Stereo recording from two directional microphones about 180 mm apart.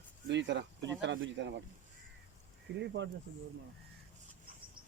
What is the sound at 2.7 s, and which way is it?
Speech, 75° right (ahead or behind).